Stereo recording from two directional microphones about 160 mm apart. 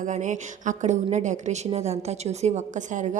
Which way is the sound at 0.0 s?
50° right (ahead or behind).